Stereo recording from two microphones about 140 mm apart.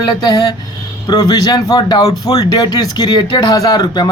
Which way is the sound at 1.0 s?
25° left (ahead or behind).